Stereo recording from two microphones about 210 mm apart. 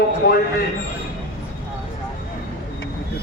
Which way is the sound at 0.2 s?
50° left (ahead or behind).